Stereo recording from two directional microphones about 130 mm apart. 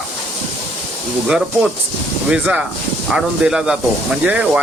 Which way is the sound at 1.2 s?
5° right (ahead or behind).